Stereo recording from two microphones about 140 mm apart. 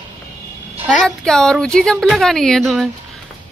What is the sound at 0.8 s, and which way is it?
A woman's voice, 5° left (ahead or behind).